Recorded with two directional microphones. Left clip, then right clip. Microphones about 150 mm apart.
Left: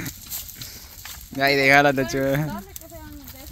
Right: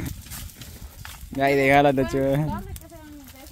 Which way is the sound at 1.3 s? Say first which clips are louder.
Left 2 dB; 20° right (ahead or behind).